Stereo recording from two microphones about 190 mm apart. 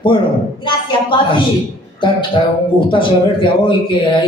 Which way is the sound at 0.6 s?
25° left (ahead or behind).